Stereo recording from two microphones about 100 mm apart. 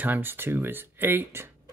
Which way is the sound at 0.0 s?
20° right (ahead or behind).